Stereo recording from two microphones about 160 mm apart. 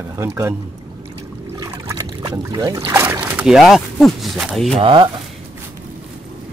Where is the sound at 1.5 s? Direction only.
20° right (ahead or behind).